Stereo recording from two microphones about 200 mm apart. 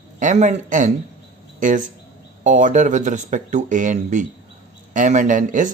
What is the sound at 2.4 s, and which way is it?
Speech, 40° right (ahead or behind).